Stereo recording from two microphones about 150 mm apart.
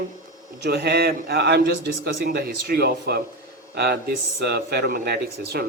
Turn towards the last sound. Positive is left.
turn(degrees=-90)